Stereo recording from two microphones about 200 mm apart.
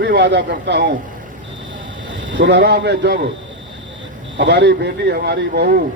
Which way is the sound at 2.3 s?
65° right (ahead or behind).